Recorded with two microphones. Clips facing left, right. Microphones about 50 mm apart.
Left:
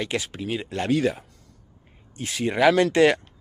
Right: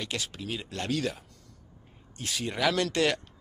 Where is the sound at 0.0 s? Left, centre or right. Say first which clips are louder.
Left 7 dB; left.